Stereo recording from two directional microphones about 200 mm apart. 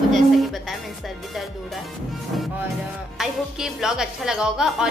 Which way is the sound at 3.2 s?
Centre (ahead or behind).